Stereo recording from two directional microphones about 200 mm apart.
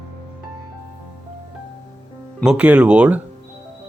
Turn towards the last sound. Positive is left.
turn(degrees=-5)  # may be behind; listen again after turning